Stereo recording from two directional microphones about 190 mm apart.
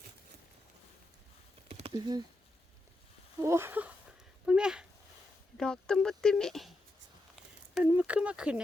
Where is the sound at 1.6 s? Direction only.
30° right (ahead or behind).